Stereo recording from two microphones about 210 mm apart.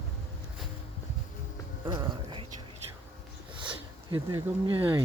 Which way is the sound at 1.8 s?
25° right (ahead or behind).